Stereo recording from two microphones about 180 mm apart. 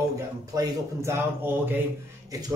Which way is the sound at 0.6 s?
15° right (ahead or behind).